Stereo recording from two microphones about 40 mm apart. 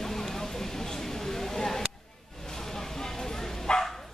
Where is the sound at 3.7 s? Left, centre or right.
Left.